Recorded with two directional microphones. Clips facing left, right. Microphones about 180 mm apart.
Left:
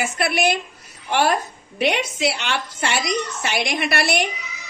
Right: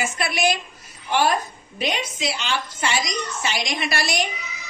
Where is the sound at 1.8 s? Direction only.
70° left (ahead or behind).